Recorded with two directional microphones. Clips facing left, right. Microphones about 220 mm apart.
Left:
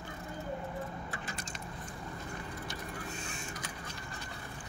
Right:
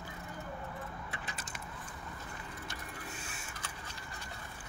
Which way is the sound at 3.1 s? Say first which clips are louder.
Left 5 dB; 5° right (ahead or behind).